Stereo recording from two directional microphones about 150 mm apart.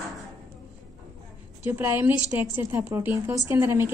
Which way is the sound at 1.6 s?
10° right (ahead or behind).